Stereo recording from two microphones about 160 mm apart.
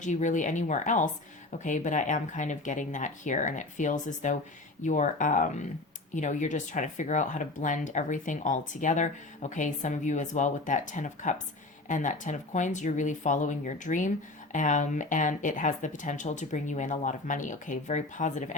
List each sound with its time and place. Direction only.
0.0 s speech: 50° left (ahead or behind)